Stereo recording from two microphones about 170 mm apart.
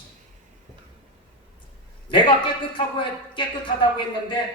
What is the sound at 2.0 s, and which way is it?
A man's voice, 30° left (ahead or behind).